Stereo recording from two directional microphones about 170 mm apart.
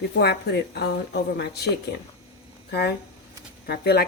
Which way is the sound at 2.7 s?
70° left (ahead or behind).